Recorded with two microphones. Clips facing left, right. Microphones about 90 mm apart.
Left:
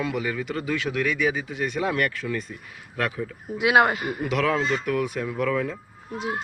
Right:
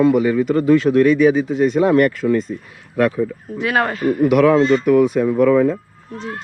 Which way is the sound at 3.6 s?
10° left (ahead or behind).